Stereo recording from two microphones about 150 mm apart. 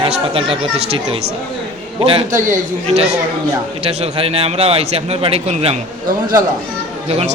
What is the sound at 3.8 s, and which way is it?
A man's voice, 40° right (ahead or behind).